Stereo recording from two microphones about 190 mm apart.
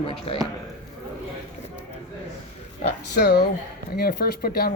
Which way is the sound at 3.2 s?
55° left (ahead or behind).